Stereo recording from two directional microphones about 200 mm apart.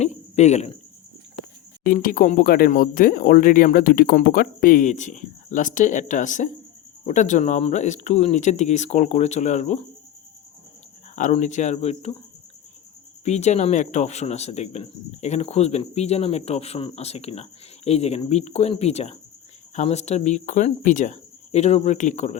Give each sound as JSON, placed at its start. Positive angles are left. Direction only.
{"t": 0.0, "sound": "a sound", "side_deg": 35}
{"t": 1.8, "sound": "speech", "side_deg": 45}
{"t": 11.1, "sound": "speech", "side_deg": 35}
{"t": 13.2, "sound": "speech", "side_deg": 35}